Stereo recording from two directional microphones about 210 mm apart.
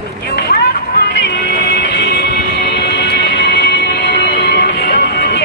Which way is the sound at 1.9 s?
50° left (ahead or behind).